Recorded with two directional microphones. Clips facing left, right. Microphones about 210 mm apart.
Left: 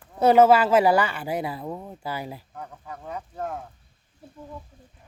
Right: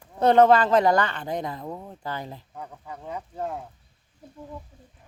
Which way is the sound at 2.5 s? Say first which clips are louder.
Even; 15° right (ahead or behind).